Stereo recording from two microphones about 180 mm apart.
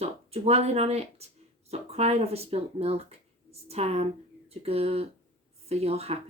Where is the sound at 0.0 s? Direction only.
35° right (ahead or behind).